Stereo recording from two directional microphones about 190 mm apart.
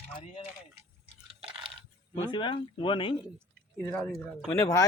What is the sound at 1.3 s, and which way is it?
Chewing, 30° right (ahead or behind).